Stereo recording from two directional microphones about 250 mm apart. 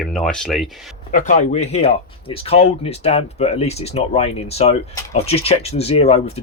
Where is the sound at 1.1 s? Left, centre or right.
Left.